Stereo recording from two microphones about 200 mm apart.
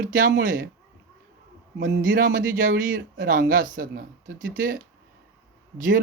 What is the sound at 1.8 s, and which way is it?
Speech, 45° right (ahead or behind).